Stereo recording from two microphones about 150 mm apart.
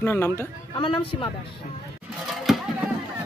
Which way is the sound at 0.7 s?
35° left (ahead or behind).